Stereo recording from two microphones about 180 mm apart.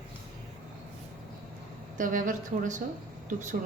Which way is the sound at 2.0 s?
45° right (ahead or behind).